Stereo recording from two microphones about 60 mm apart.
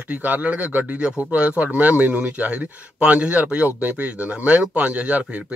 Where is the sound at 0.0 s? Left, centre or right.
Right.